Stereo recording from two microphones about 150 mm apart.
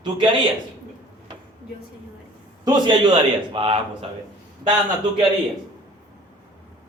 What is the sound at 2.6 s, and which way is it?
Speech, 30° right (ahead or behind).